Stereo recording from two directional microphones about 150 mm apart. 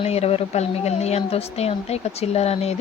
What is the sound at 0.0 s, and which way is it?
Speech, 45° left (ahead or behind).